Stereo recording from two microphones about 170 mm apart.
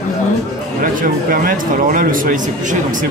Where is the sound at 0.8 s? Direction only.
55° right (ahead or behind).